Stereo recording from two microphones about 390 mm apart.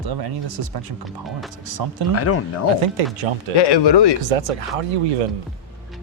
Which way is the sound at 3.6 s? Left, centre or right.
Left.